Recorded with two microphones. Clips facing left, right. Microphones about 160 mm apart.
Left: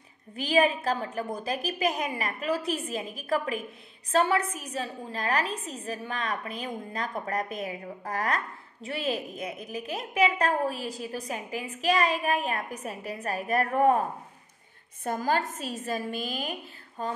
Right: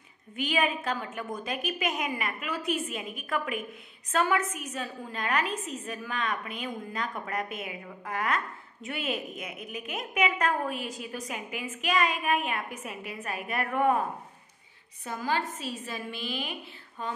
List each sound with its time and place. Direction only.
0.4 s a woman's voice: 35° left (ahead or behind)
15.0 s a woman's voice: 45° left (ahead or behind)